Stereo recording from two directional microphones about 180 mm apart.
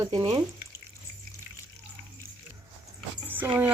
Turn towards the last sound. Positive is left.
turn(degrees=-10)  # may be behind; listen again after turning